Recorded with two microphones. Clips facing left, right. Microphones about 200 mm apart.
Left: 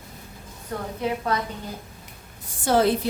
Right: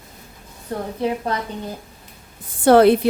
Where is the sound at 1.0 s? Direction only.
35° right (ahead or behind).